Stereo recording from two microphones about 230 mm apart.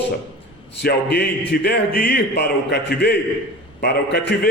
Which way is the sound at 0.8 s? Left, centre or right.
Left.